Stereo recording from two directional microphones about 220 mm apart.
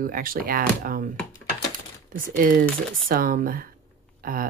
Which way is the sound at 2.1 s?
40° right (ahead or behind).